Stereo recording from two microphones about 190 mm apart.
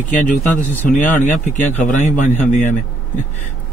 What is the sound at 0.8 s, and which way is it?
Speech, 45° left (ahead or behind).